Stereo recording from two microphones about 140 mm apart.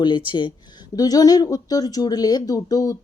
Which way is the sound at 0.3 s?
35° left (ahead or behind).